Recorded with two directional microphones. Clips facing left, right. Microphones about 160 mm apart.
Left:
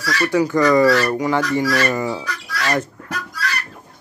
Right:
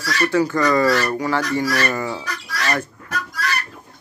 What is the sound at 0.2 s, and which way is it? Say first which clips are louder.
Fowl: left 2 dB; 15° left (ahead or behind).